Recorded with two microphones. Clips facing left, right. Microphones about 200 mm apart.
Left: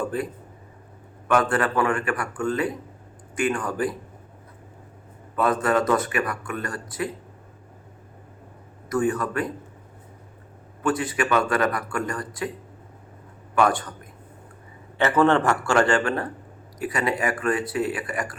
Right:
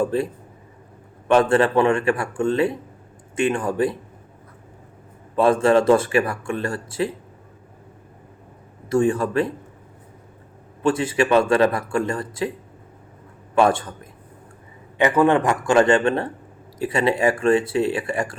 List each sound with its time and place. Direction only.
0.0 s speech: 25° right (ahead or behind)
1.3 s speech: 25° right (ahead or behind)
5.4 s speech: 25° right (ahead or behind)
8.9 s speech: 30° right (ahead or behind)
10.8 s speech: 25° right (ahead or behind)
13.6 s speech: 25° right (ahead or behind)
14.9 s a man's voice: 15° right (ahead or behind)